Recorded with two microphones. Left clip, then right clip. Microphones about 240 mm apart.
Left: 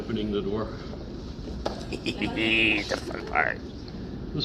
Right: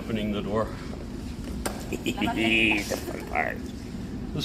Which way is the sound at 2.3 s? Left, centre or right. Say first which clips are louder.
Even; centre.